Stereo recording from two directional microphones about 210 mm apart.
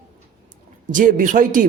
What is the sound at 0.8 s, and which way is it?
Speech, 40° right (ahead or behind).